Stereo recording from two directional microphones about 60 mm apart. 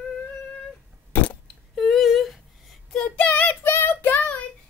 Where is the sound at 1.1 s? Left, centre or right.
Left.